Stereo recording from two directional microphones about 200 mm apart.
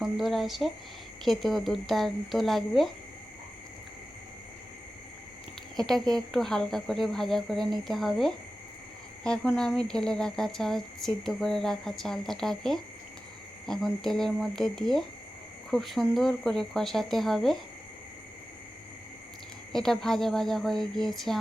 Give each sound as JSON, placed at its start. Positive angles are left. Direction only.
{"t": 0.0, "sound": "speech", "side_deg": 0}
{"t": 5.7, "sound": "speech", "side_deg": 0}
{"t": 19.7, "sound": "speech", "side_deg": 0}